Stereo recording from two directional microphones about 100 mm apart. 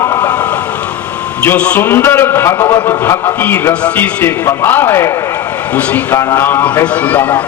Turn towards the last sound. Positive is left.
turn(degrees=15)  # may be behind; listen again after turning